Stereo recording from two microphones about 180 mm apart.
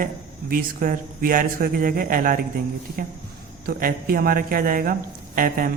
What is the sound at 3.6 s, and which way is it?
Speech, 55° right (ahead or behind).